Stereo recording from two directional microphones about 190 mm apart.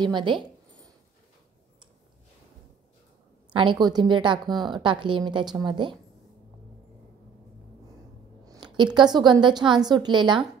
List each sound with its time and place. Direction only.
0.0 s zipper: 25° right (ahead or behind)
3.5 s a woman's voice: 25° right (ahead or behind)
8.5 s a woman's voice: 25° right (ahead or behind)